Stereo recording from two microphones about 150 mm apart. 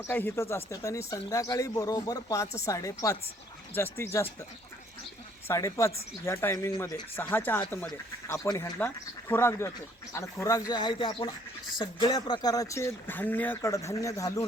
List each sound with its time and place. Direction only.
0.1 s speech: 15° left (ahead or behind)
5.5 s speech: 20° left (ahead or behind)